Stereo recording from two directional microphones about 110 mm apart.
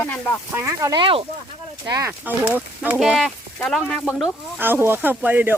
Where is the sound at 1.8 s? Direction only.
30° right (ahead or behind).